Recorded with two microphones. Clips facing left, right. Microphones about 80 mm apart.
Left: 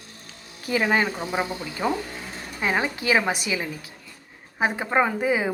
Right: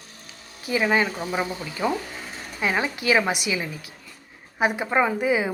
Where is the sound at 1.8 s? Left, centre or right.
Left.